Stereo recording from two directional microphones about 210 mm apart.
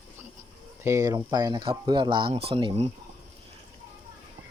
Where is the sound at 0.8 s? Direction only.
15° right (ahead or behind).